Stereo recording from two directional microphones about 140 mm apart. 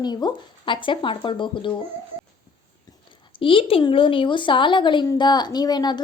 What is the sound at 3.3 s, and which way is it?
Speech, 40° left (ahead or behind).